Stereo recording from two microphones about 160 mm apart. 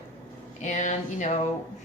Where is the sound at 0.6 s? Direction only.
50° left (ahead or behind).